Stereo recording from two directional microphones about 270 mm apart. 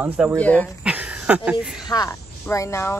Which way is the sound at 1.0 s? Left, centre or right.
Centre.